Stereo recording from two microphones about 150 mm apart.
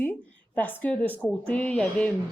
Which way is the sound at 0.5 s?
10° left (ahead or behind).